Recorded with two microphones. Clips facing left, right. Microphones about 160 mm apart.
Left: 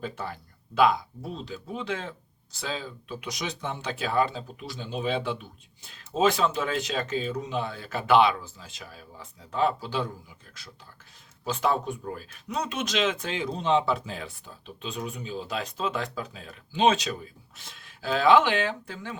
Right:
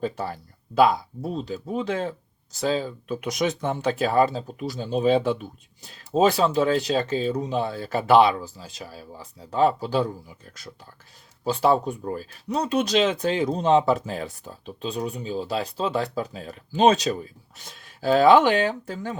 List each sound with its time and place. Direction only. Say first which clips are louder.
0.0 s speech: right 6 dB; 40° right (ahead or behind)